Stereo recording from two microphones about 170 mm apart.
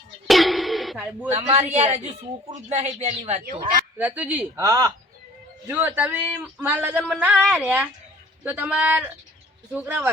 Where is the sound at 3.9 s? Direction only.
10° right (ahead or behind).